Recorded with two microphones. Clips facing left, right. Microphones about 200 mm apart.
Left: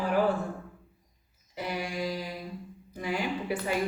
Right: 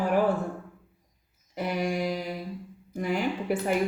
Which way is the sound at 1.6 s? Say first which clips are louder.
Right 5 dB; 55° right (ahead or behind).